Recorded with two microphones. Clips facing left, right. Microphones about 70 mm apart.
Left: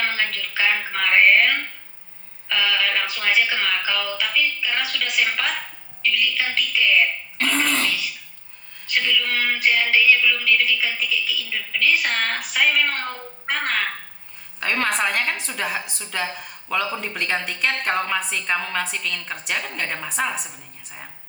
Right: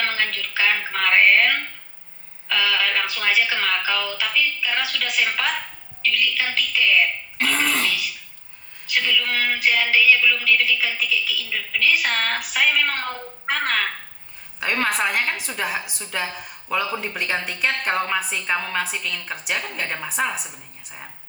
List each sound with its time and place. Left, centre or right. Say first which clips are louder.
0.0 s a sound: even; centre
2.5 s a woman's voice: even; centre
9.0 s a woman's voice: even; centre
10.8 s a woman's voice: right 1 dB; centre
11.5 s a woman's voice: even; centre
13.5 s a woman's voice: right 1 dB; centre
14.6 s a woman's voice: even; centre